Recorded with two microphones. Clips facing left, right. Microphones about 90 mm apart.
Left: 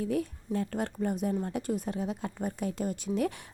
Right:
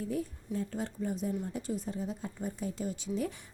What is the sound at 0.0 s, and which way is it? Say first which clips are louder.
Speech: left 4 dB; 75° left (ahead or behind).